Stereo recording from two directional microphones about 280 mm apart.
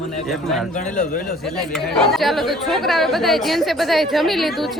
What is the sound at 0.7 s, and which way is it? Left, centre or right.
Speech, left.